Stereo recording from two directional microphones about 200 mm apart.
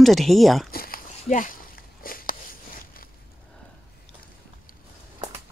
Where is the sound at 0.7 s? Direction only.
45° left (ahead or behind).